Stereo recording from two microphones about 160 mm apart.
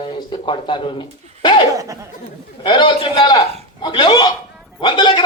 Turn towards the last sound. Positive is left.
turn(degrees=30)  # may be behind; listen again after turning